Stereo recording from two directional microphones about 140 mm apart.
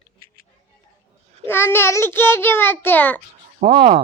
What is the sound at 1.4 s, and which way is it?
A child's voice, 15° left (ahead or behind).